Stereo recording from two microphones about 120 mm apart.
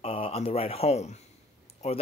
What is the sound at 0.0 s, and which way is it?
Speech, 55° left (ahead or behind).